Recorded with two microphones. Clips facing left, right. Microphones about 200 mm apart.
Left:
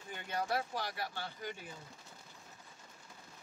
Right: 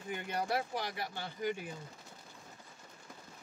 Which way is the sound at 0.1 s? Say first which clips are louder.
Right 2 dB; 15° right (ahead or behind).